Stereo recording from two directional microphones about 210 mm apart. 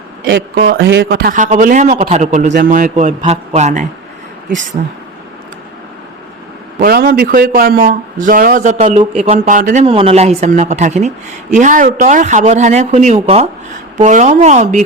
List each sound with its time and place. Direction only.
0.3 s a man's voice: 60° right (ahead or behind); by 4.9 s 35° right (ahead or behind)
6.7 s a man's voice: 45° right (ahead or behind)